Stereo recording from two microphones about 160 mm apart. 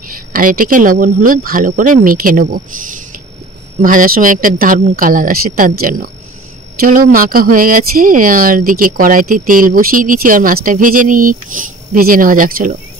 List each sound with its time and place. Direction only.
0.3 s speech: 60° right (ahead or behind)
3.8 s speech: 60° right (ahead or behind)